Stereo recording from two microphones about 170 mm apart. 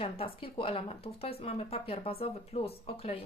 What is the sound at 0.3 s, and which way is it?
Speech, 30° left (ahead or behind).